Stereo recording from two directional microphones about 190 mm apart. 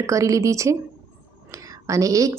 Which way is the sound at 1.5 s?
15° right (ahead or behind).